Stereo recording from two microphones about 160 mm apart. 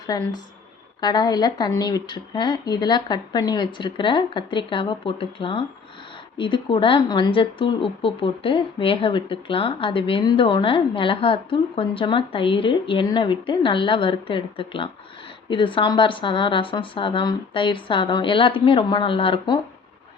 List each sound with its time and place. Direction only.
0.1 s a woman's voice: 25° left (ahead or behind)